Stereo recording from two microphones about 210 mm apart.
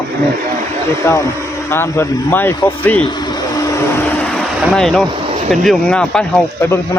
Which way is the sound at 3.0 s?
20° left (ahead or behind).